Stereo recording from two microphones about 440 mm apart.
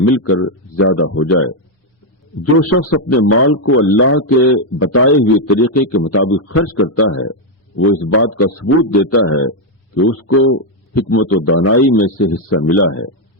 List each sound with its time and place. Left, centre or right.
0.0 s a man's voice: left